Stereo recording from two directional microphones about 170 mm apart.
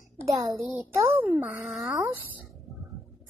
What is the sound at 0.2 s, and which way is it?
A child's voice, 20° right (ahead or behind).